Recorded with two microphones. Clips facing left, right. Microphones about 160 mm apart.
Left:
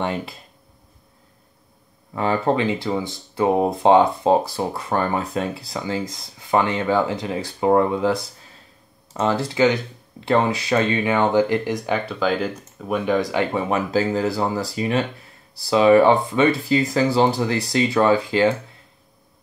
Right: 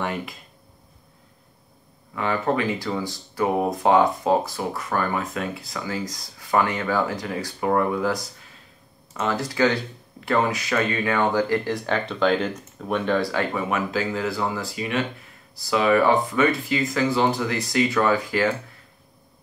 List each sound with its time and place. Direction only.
0.0 s speech: 30° left (ahead or behind)
2.1 s speech: 30° left (ahead or behind)